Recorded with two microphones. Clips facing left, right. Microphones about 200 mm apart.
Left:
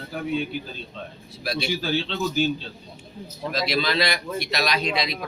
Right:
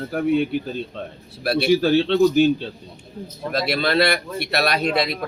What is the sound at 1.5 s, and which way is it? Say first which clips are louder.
Speech: right 9 dB; 60° right (ahead or behind).